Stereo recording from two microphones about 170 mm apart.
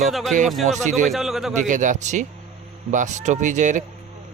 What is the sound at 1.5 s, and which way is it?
Speech, 45° right (ahead or behind).